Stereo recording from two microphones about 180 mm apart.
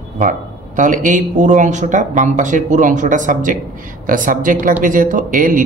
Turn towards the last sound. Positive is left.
turn(degrees=-45)  # may be behind; listen again after turning